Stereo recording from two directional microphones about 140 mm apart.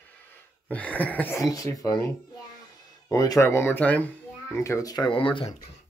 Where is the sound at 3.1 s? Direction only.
25° left (ahead or behind).